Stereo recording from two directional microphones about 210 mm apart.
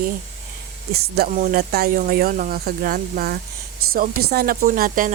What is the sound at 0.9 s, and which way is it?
Speech, 50° right (ahead or behind).